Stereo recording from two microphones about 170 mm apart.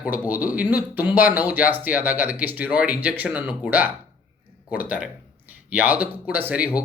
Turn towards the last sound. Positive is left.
turn(degrees=-10)  # may be behind; listen again after turning